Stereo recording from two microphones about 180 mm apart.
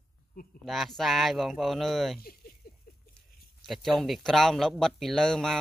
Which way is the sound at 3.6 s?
Centre (ahead or behind).